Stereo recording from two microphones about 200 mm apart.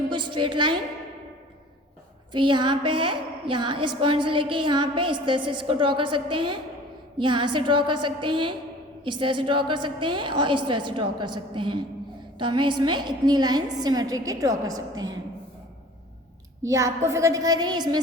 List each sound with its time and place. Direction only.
0.1 s a woman's voice: 25° right (ahead or behind)
2.3 s a woman's voice: 25° right (ahead or behind)
16.6 s a woman's voice: 15° right (ahead or behind)